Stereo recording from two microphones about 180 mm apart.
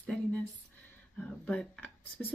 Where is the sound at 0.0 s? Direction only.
5° left (ahead or behind).